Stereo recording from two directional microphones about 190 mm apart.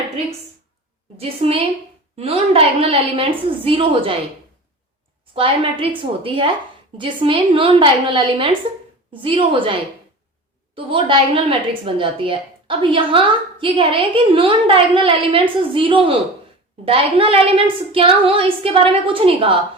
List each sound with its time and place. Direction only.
1.1 s a woman's voice: 30° right (ahead or behind)
5.3 s a woman's voice: 30° right (ahead or behind)
10.8 s a woman's voice: 25° right (ahead or behind)